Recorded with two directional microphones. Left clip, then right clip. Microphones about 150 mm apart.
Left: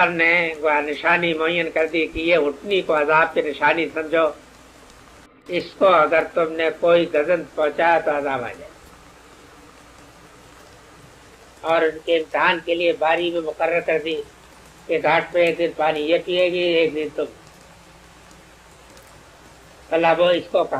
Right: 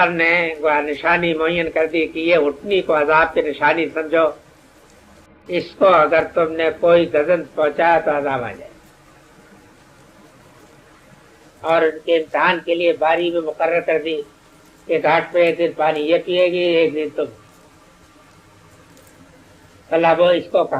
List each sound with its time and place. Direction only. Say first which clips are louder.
0.0 s a man's voice: right 2 dB; 30° left (ahead or behind)
5.5 s a man's voice: right 2 dB; 30° left (ahead or behind)
11.6 s a man's voice: right 3 dB; 30° left (ahead or behind)
19.9 s a man's voice: right 3 dB; 30° left (ahead or behind)